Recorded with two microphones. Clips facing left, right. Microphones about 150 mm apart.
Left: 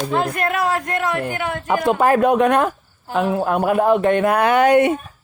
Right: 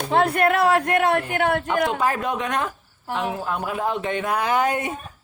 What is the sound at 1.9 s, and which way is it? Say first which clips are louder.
Speech: left 8 dB; 55° left (ahead or behind).